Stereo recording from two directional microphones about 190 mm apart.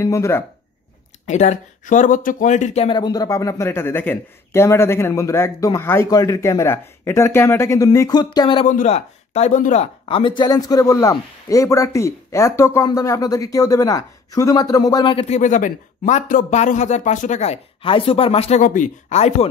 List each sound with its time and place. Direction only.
0.0 s speech: 15° left (ahead or behind)
1.2 s speech: 35° left (ahead or behind)
8.6 s speech: 40° left (ahead or behind)
10.0 s a man's voice: 25° left (ahead or behind)